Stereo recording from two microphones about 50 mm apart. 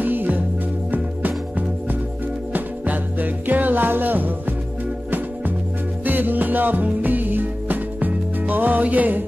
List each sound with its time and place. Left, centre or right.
0.0 s music: right
2.5 s music: right
6.0 s music: right